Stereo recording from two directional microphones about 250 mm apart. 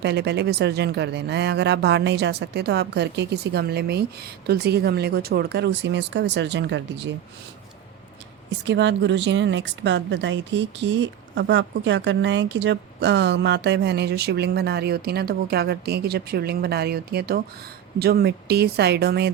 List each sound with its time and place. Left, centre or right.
0.0 s speech: right
8.4 s a woman's voice: right